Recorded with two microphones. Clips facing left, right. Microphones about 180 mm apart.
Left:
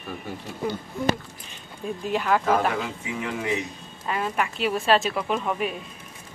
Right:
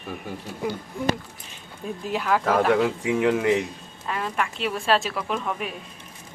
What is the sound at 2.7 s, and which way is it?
Speech, 70° right (ahead or behind).